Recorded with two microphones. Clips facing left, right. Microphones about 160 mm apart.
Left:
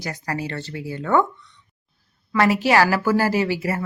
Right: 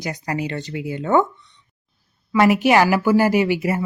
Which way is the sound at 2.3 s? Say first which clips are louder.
Right 3 dB; 20° right (ahead or behind).